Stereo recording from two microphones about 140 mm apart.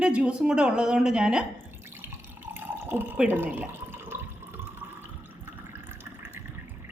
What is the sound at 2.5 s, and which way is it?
Water, 15° right (ahead or behind).